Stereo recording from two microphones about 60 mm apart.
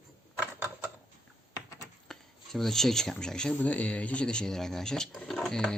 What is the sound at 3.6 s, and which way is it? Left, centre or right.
Speech, left.